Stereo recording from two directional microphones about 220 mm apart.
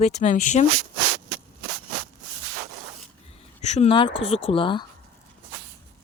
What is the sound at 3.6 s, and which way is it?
Speech, 30° left (ahead or behind).